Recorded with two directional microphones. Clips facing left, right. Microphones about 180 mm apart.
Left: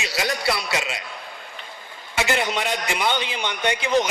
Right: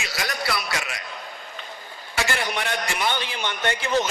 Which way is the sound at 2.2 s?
20° left (ahead or behind).